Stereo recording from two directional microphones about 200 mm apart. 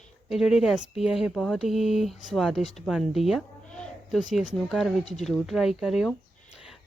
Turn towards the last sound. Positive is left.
turn(degrees=0)  # may be behind; listen again after turning